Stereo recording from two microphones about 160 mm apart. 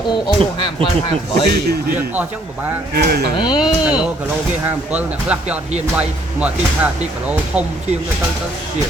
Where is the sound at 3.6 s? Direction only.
5° right (ahead or behind).